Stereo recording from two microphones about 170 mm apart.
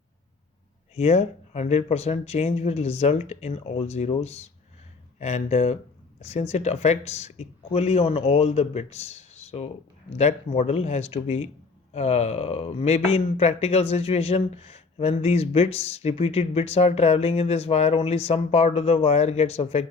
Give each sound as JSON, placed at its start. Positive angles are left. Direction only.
{"t": 0.9, "sound": "speech", "side_deg": 40}